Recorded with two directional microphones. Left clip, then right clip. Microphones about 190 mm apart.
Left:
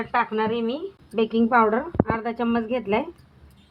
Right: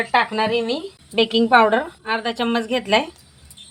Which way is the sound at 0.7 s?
30° right (ahead or behind).